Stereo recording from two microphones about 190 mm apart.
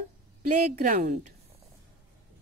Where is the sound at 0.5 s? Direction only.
40° right (ahead or behind).